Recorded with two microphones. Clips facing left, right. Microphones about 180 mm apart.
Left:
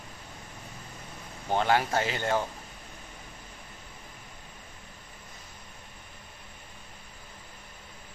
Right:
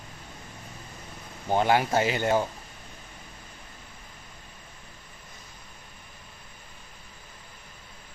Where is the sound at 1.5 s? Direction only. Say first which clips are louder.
Right 3 dB; 15° right (ahead or behind).